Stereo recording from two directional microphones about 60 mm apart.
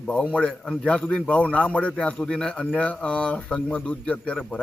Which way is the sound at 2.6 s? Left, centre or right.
Left.